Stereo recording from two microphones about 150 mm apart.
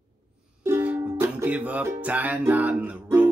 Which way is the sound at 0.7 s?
10° right (ahead or behind).